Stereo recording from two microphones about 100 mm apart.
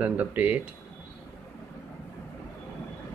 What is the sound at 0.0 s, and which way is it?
Speech, 15° right (ahead or behind).